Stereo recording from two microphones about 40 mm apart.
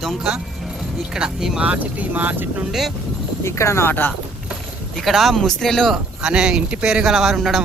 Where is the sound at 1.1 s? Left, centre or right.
Centre.